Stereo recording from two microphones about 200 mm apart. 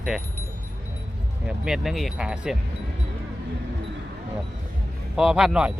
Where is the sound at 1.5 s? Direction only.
5° right (ahead or behind).